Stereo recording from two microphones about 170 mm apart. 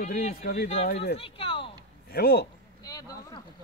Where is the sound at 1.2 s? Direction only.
35° left (ahead or behind).